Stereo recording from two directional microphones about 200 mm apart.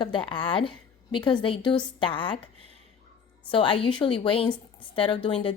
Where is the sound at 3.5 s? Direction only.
25° left (ahead or behind).